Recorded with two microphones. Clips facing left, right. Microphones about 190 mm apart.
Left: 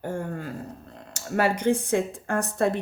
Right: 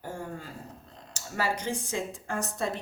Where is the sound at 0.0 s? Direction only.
55° left (ahead or behind).